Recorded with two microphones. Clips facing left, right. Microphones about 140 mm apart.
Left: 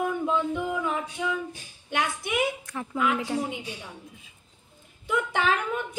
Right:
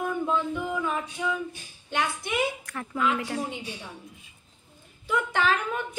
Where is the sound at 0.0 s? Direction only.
15° left (ahead or behind).